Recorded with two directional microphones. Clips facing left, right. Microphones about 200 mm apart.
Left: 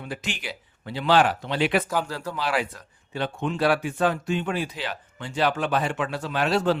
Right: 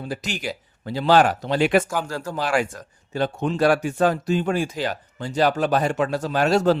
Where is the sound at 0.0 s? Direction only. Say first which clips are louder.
Right 4 dB; 40° right (ahead or behind).